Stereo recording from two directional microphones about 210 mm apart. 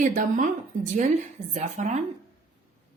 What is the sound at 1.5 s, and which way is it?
Speech, 35° right (ahead or behind).